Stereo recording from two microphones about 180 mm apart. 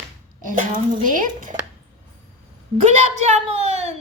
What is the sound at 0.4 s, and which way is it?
A woman's voice, 45° right (ahead or behind).